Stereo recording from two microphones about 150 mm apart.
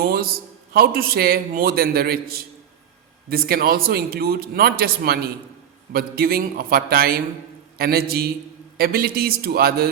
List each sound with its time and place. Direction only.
0.0 s a man's voice: 80° right